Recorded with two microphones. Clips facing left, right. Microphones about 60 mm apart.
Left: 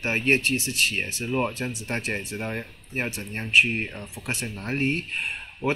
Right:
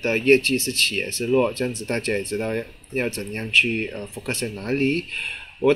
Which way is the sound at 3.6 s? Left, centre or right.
Left.